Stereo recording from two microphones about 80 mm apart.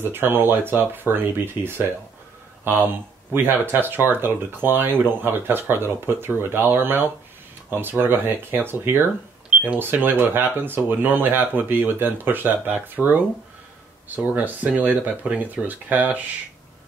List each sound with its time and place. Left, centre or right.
0.0 s a man's voice: right